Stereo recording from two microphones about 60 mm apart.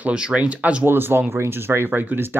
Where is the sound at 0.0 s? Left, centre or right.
Centre.